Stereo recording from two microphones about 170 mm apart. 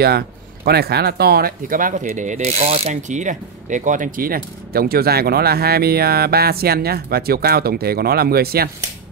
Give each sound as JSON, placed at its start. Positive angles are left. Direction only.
{"t": 0.7, "sound": "speech", "side_deg": -70}